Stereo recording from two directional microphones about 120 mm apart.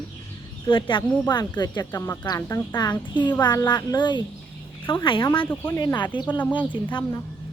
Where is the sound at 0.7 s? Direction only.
40° left (ahead or behind).